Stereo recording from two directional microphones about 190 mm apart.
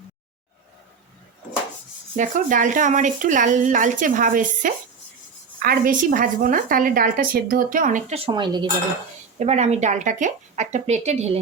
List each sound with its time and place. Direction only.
2.1 s a woman's voice: 40° right (ahead or behind); by 8.6 s 25° right (ahead or behind)
9.4 s speech: 35° right (ahead or behind)